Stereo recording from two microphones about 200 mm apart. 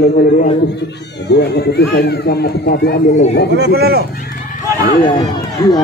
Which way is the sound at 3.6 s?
50° right (ahead or behind).